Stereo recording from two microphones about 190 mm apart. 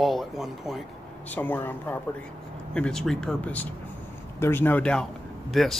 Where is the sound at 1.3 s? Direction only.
10° left (ahead or behind).